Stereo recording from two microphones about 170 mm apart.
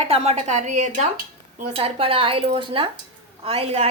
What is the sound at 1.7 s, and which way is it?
A woman's voice, 35° right (ahead or behind).